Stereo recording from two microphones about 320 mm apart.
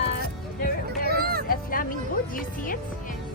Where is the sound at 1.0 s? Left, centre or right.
Right.